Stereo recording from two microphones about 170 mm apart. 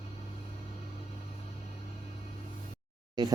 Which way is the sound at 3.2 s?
25° right (ahead or behind).